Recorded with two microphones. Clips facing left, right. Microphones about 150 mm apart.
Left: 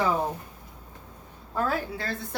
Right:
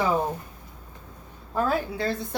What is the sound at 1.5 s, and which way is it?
Speech, 15° right (ahead or behind).